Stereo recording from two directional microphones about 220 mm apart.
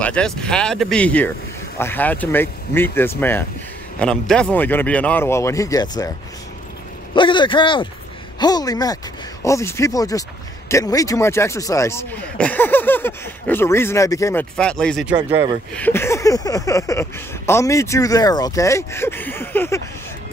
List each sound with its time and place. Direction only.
0.0 s speech: 5° left (ahead or behind)
7.2 s a man's voice: 20° left (ahead or behind)